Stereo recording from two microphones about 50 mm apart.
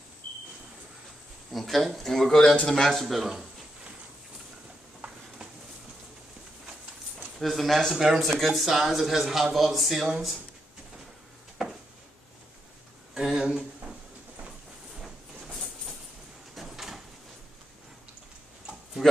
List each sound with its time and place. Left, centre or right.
1.5 s speech: centre
7.3 s speech: centre
7.9 s speech: centre
13.1 s a sound: centre
15.0 s train: centre
16.5 s sliding door: centre
19.0 s a sound: centre